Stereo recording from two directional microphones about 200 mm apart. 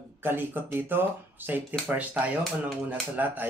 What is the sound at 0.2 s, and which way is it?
Speech, 10° right (ahead or behind).